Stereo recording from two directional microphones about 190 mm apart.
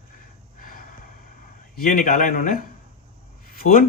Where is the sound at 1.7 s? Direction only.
50° left (ahead or behind).